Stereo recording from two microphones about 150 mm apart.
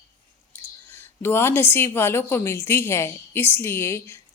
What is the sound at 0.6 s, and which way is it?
A woman's voice, 15° left (ahead or behind).